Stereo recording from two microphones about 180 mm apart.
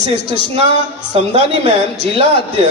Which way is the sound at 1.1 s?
35° right (ahead or behind).